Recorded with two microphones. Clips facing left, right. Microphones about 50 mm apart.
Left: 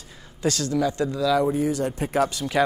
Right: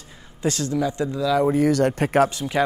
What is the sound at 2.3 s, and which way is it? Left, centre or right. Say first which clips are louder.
Speech: even; right.